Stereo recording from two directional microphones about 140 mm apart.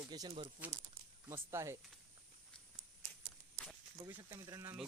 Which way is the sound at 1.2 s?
20° right (ahead or behind).